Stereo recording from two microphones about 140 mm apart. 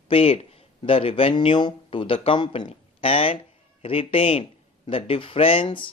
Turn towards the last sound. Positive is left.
turn(degrees=35)  # may be behind; listen again after turning